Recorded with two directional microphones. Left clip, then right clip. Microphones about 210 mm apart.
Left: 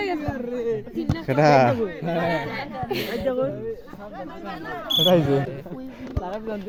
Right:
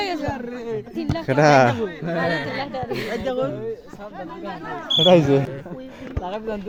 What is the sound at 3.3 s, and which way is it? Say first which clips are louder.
Speech: even; 50° right (ahead or behind).